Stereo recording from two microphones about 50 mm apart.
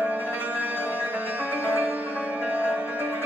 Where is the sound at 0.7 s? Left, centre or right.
Left.